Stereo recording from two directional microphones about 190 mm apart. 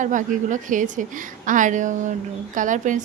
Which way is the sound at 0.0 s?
40° right (ahead or behind).